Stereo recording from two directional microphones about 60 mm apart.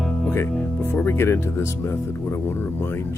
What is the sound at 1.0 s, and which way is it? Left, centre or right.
Music, left.